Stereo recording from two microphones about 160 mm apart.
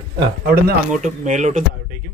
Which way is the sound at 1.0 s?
50° right (ahead or behind).